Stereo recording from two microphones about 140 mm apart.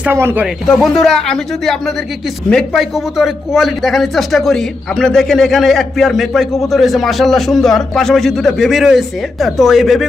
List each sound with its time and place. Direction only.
0.0 s speech: 15° right (ahead or behind)
0.8 s a man's voice: centre (ahead or behind)